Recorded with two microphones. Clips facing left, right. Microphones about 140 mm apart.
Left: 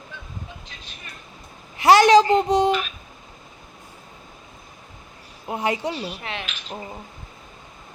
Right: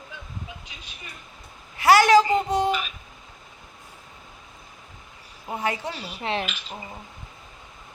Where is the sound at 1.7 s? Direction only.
20° left (ahead or behind).